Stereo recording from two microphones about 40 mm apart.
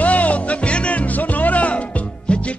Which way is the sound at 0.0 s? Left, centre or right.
Left.